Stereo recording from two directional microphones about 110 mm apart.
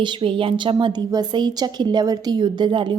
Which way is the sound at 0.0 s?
50° right (ahead or behind).